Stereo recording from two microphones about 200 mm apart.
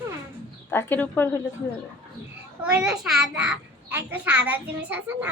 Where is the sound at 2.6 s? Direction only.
5° right (ahead or behind).